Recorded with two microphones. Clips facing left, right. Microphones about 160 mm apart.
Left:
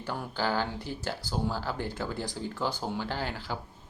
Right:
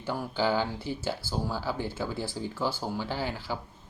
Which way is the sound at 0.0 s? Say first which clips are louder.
Right 3 dB; 10° right (ahead or behind).